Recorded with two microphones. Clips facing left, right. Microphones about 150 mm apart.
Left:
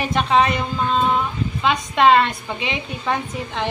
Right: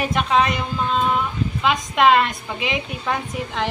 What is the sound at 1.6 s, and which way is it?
A woman's voice, 5° right (ahead or behind).